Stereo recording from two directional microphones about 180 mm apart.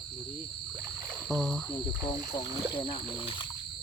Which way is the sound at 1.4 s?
5° left (ahead or behind).